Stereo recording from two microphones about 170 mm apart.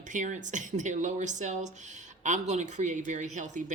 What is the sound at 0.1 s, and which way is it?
Speech, 45° right (ahead or behind).